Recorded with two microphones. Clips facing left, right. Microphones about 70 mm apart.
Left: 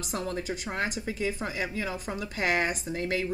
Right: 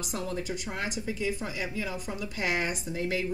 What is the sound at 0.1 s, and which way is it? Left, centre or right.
Speech, left.